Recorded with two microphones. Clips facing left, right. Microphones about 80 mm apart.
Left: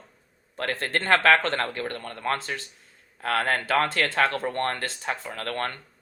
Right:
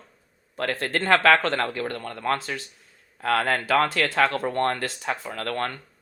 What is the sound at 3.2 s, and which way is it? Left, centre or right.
Speech, right.